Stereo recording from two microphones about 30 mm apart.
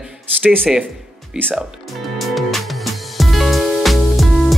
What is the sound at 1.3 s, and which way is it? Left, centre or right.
Speech, right.